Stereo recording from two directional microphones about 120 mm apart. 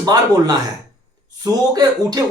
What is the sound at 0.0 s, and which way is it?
Speech, 35° right (ahead or behind).